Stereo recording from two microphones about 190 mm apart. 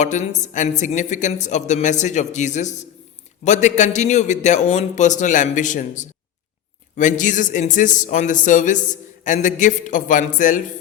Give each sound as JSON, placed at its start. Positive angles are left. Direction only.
{"t": 0.0, "sound": "speech", "side_deg": 40}